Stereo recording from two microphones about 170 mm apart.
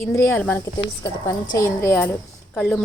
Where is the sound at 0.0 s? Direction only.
15° left (ahead or behind).